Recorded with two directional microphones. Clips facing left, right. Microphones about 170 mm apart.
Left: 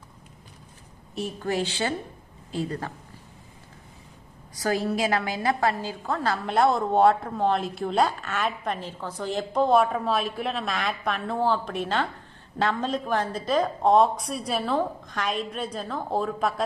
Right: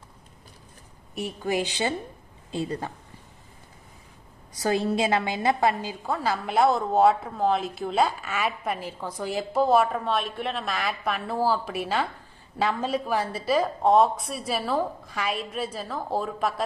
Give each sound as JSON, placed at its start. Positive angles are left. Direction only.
{"t": 1.1, "sound": "a woman's voice", "side_deg": -15}
{"t": 4.6, "sound": "a woman's voice", "side_deg": -25}